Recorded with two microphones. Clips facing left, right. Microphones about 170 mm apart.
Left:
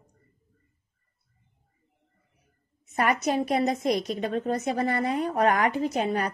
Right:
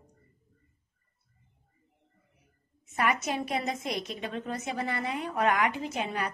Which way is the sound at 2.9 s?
35° left (ahead or behind).